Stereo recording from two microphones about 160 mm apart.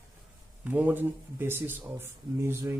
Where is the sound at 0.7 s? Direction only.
10° right (ahead or behind).